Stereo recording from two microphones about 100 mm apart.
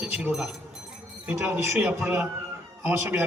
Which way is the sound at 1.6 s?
20° right (ahead or behind).